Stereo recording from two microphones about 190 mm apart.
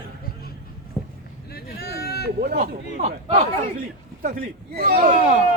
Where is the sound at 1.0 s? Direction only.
15° left (ahead or behind).